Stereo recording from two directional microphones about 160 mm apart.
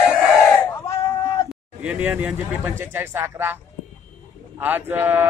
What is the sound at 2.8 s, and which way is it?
Speech, 15° right (ahead or behind).